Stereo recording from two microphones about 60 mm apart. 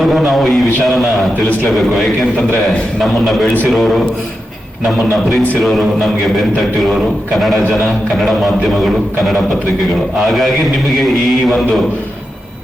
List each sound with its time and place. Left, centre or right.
0.0 s a man's voice: centre
3.7 s a man's voice: centre
5.6 s a man's voice: centre
7.3 s a man's voice: centre
10.2 s a man's voice: centre